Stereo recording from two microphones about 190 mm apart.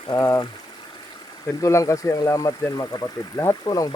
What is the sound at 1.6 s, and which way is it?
Speech, 15° left (ahead or behind).